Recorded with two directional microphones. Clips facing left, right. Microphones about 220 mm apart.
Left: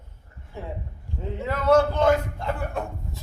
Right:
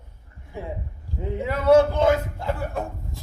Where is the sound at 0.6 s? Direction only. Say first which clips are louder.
Right 2 dB; 15° right (ahead or behind).